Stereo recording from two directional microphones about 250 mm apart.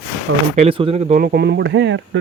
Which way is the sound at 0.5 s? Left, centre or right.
Right.